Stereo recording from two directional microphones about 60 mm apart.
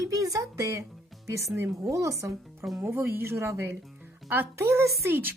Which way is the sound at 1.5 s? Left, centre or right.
Right.